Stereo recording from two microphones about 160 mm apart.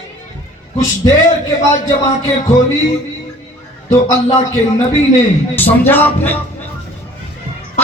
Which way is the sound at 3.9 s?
25° left (ahead or behind).